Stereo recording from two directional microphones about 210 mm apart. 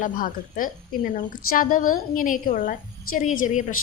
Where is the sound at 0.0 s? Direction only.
40° left (ahead or behind).